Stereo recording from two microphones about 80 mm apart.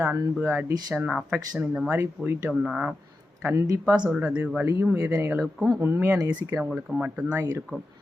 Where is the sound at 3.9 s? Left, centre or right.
Centre.